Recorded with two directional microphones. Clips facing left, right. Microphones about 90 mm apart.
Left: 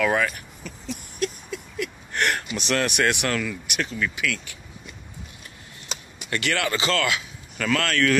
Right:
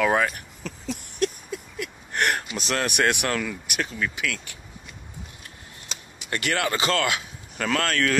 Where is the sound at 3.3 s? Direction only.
30° right (ahead or behind).